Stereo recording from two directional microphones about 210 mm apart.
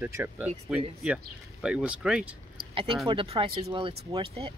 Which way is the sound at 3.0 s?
25° right (ahead or behind).